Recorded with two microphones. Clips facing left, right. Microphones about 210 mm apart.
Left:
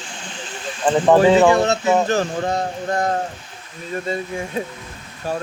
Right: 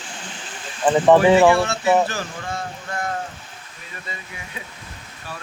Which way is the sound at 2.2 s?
40° left (ahead or behind).